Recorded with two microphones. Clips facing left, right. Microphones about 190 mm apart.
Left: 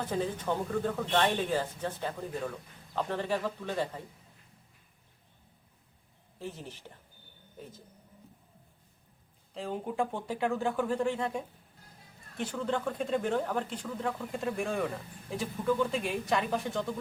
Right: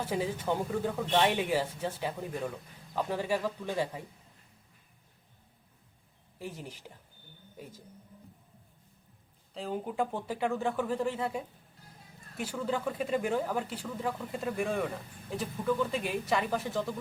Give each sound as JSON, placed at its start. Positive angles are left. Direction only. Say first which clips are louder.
{"t": 0.0, "sound": "speech", "louder": "even", "side_deg": -10}
{"t": 6.4, "sound": "speech", "louder": "even", "side_deg": -10}
{"t": 9.6, "sound": "speech", "louder": "even", "side_deg": 0}